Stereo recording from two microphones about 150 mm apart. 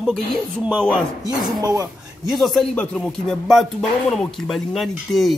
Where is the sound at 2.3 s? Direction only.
Centre (ahead or behind).